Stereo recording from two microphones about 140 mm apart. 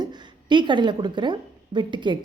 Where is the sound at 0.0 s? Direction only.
30° right (ahead or behind).